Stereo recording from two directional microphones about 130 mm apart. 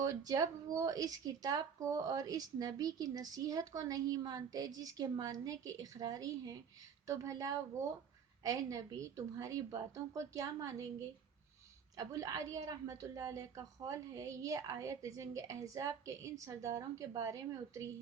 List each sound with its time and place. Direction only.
0.3 s a woman's voice: 30° right (ahead or behind)
11.9 s a woman's voice: 25° right (ahead or behind)